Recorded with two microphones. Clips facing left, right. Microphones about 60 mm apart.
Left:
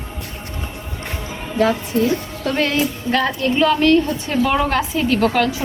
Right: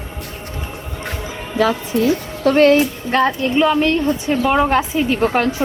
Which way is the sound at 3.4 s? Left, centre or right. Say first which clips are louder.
Even; centre.